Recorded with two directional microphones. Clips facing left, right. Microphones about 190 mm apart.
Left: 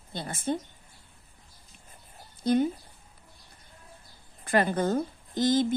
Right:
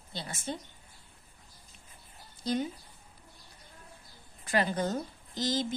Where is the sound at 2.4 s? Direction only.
55° left (ahead or behind).